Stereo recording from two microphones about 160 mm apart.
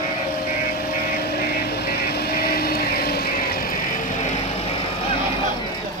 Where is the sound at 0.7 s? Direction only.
65° left (ahead or behind); by 5.1 s 40° left (ahead or behind).